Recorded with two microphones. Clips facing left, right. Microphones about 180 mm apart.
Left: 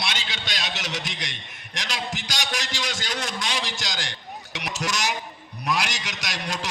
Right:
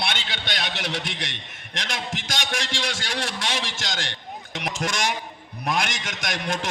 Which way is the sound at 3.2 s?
70° right (ahead or behind).